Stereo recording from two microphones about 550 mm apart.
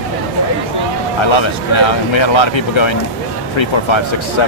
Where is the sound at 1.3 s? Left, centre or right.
Left.